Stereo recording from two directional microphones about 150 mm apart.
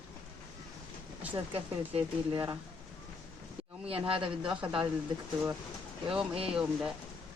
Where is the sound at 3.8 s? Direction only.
35° right (ahead or behind).